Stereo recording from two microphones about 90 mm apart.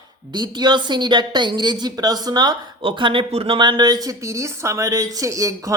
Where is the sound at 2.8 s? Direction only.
75° right (ahead or behind).